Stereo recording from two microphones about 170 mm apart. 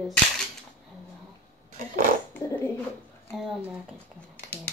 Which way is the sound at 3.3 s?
Centre (ahead or behind).